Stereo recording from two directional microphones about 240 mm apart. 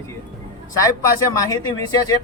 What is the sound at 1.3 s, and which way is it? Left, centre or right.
Speech, centre.